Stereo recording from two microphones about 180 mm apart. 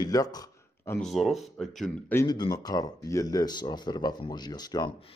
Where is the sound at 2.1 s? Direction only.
20° left (ahead or behind).